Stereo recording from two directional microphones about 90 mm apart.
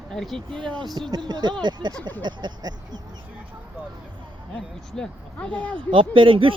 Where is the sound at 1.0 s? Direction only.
55° right (ahead or behind).